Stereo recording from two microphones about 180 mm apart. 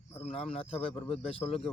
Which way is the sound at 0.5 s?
30° left (ahead or behind).